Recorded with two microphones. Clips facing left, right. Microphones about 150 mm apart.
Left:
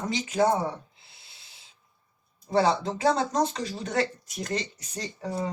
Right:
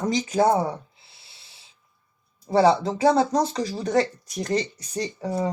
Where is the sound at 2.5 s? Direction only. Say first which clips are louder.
Right 5 dB; 30° right (ahead or behind).